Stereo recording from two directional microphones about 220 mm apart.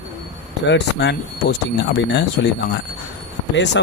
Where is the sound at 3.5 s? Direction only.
55° left (ahead or behind).